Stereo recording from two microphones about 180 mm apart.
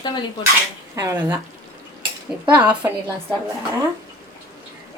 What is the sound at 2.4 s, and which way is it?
Speech, 10° right (ahead or behind).